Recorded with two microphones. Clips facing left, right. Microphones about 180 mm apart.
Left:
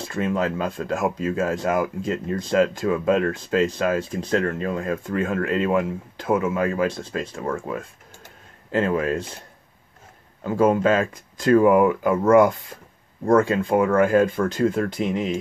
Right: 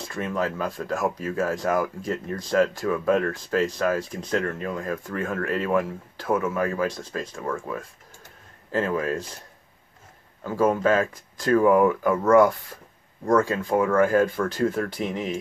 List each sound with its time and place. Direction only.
0.0 s speech: 25° left (ahead or behind)
8.7 s speech: 20° left (ahead or behind)
10.4 s speech: 20° left (ahead or behind)